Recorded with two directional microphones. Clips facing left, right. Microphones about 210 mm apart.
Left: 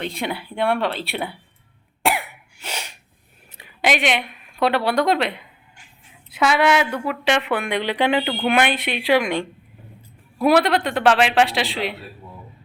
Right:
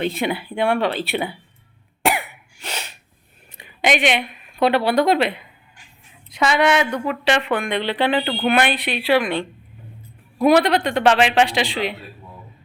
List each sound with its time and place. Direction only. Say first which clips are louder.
0.0 s a woman's voice: right 4 dB; 5° right (ahead or behind)
2.0 s cough: right 1 dB; 5° left (ahead or behind)
3.6 s a woman's voice: right 2 dB; centre (ahead or behind)
10.4 s a woman's voice: right 2 dB; centre (ahead or behind)